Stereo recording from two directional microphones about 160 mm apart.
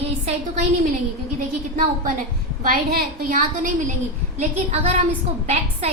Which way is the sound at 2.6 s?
65° right (ahead or behind).